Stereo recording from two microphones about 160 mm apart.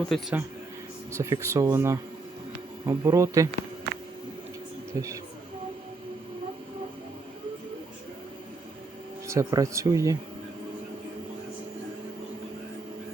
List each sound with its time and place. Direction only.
0.1 s speech: 5° right (ahead or behind)
1.1 s speech: 20° right (ahead or behind)
4.9 s speech: 20° right (ahead or behind)
9.2 s speech: 20° right (ahead or behind)